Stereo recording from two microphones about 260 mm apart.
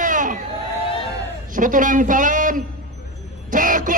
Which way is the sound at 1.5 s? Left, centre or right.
Right.